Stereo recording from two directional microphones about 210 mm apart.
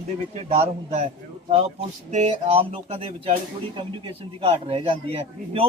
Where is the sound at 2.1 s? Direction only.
30° right (ahead or behind).